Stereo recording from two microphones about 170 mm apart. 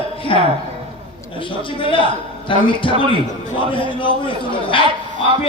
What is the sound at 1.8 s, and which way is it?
A man's voice, 30° left (ahead or behind).